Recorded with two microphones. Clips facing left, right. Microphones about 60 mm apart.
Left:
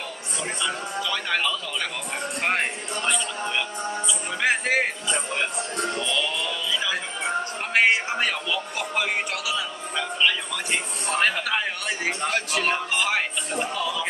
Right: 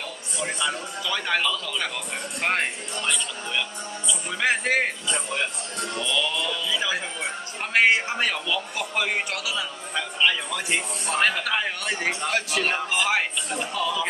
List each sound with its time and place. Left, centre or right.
0.6 s a man's voice: centre
4.3 s a man's voice: centre
5.9 s music: centre
7.7 s a man's voice: centre